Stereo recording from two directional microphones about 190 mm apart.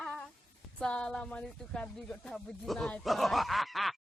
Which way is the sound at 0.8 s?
5° left (ahead or behind).